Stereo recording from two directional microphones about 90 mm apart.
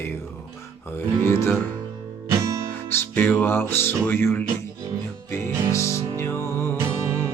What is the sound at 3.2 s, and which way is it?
Speech, 20° left (ahead or behind).